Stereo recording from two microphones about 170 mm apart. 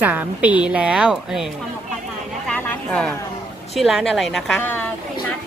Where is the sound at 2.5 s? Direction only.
10° left (ahead or behind).